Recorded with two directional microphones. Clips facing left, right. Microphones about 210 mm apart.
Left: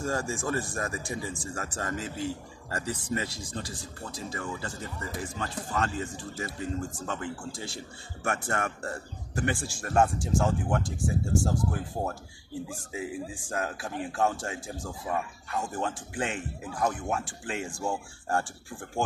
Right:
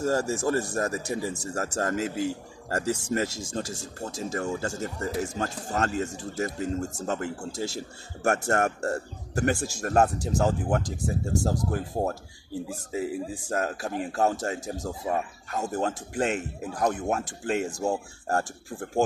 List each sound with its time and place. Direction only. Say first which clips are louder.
0.0 s a man's voice: right 6 dB; 40° right (ahead or behind)